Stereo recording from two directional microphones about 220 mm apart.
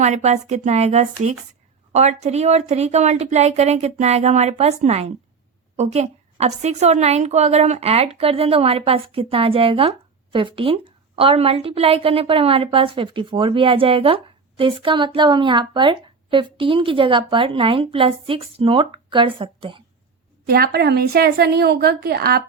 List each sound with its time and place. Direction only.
0.0 s speech: 30° right (ahead or behind)
20.5 s a woman's voice: 45° right (ahead or behind)